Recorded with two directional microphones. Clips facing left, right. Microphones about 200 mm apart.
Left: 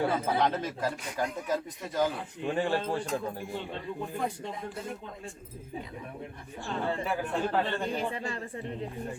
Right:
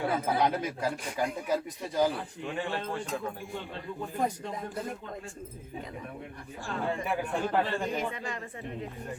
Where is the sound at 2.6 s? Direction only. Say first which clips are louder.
Left 5 dB; 35° left (ahead or behind).